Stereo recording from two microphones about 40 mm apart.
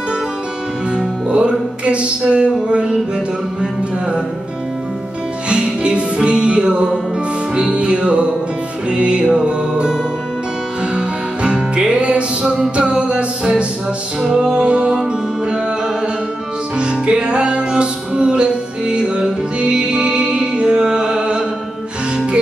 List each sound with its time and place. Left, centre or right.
0.9 s music: right
5.5 s music: right
11.0 s music: right
16.7 s music: right